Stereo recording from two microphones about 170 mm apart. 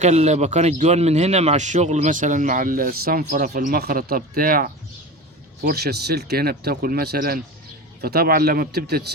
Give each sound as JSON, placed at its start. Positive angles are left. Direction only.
{"t": 0.0, "sound": "speech", "side_deg": -40}
{"t": 5.6, "sound": "speech", "side_deg": -70}